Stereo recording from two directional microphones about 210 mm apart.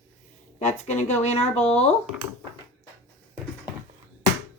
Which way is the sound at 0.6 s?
30° left (ahead or behind).